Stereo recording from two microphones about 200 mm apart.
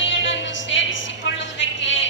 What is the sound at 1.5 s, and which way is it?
Music, 65° left (ahead or behind).